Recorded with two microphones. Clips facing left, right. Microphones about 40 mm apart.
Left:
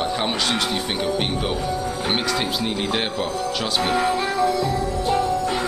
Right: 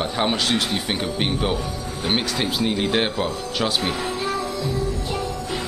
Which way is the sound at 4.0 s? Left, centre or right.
Left.